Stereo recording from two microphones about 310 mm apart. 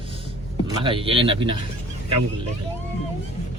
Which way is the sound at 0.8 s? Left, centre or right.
Centre.